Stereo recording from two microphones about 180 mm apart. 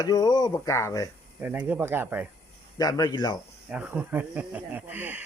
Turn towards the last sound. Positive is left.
turn(degrees=-10)  # may be behind; listen again after turning